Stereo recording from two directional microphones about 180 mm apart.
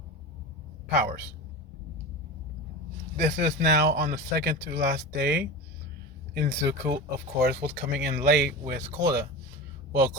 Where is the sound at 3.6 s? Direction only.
65° right (ahead or behind).